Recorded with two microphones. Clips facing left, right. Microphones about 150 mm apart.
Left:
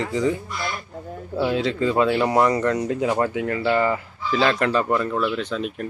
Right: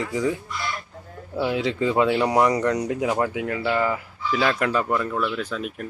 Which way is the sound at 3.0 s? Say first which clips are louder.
Left 2 dB; 5° right (ahead or behind).